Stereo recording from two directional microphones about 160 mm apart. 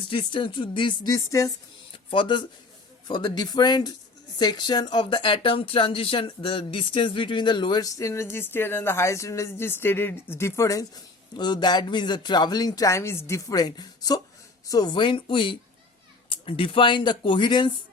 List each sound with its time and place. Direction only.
0.1 s speech: 30° left (ahead or behind)
1.9 s speech: 30° left (ahead or behind)